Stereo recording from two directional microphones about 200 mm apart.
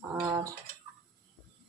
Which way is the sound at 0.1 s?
20° right (ahead or behind).